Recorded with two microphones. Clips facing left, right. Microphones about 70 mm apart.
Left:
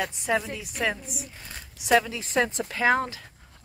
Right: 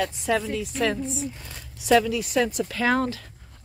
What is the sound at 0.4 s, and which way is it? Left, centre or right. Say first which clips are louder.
A woman's voice: right 4 dB; centre.